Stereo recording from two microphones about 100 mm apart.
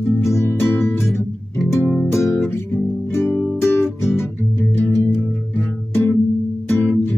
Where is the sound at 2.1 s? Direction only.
30° left (ahead or behind).